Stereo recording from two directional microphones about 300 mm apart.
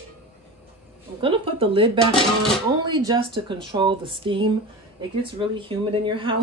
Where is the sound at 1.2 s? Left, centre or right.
Centre.